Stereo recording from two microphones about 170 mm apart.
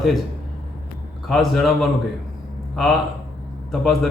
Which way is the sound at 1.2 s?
Centre (ahead or behind).